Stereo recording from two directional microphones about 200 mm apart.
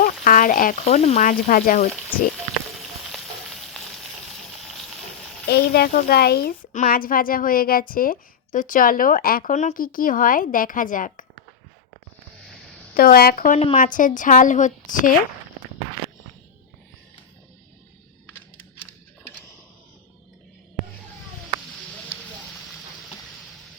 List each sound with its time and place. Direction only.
0.0 s speech: 45° left (ahead or behind)
2.8 s frying: centre (ahead or behind)
5.5 s a woman's voice: 50° left (ahead or behind)
12.9 s a woman's voice: 45° left (ahead or behind)